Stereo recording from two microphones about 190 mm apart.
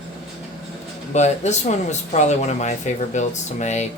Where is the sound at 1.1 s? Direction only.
35° left (ahead or behind).